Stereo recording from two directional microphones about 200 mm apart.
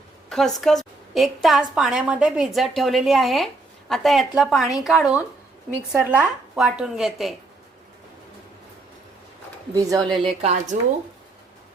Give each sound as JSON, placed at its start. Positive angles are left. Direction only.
{"t": 0.3, "sound": "a woman's voice", "side_deg": 0}
{"t": 9.7, "sound": "speech", "side_deg": -20}
{"t": 10.2, "sound": "a woman's voice", "side_deg": -35}